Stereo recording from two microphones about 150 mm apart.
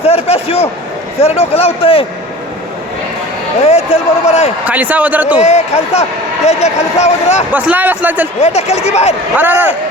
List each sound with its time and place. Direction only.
0.0 s a man's voice: 45° left (ahead or behind)
3.7 s speech: 45° left (ahead or behind)
4.6 s a man's voice: 10° right (ahead or behind)
5.4 s speech: 45° left (ahead or behind)
7.5 s a man's voice: 10° right (ahead or behind)
8.4 s speech: 45° left (ahead or behind)
9.3 s a man's voice: 15° right (ahead or behind)